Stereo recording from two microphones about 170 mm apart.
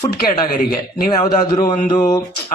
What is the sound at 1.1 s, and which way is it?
Speech, 25° left (ahead or behind).